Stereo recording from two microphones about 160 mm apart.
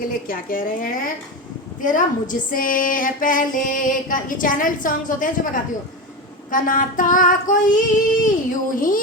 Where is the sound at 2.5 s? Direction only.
60° left (ahead or behind).